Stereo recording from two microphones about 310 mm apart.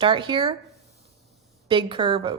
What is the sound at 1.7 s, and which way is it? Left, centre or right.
Speech, centre.